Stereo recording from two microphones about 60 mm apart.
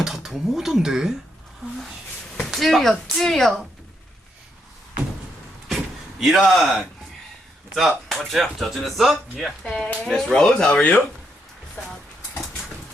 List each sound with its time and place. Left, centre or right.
0.0 s speech: centre
2.5 s speech: centre
5.6 s door: centre
7.7 s speech: centre
9.8 s speech: left